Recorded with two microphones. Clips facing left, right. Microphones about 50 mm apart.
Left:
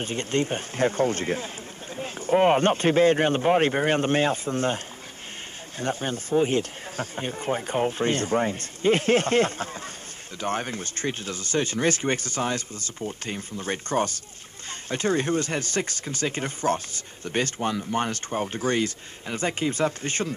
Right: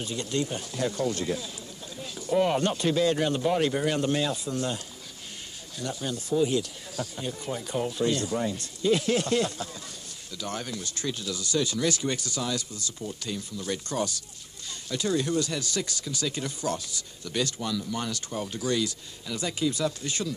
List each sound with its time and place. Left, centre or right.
0.0 s speech: left